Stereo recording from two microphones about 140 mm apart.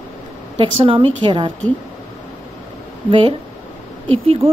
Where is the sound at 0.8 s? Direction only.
40° right (ahead or behind).